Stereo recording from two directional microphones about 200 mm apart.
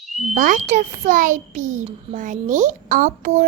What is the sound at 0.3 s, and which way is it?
A child's voice, 40° right (ahead or behind).